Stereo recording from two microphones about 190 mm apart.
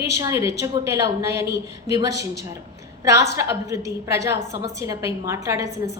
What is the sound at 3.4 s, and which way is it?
A woman's voice, 15° right (ahead or behind).